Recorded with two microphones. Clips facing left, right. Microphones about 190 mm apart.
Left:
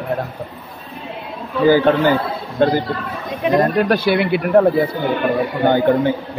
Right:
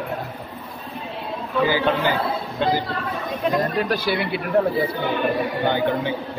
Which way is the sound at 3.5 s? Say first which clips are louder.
Left 8 dB; 65° left (ahead or behind).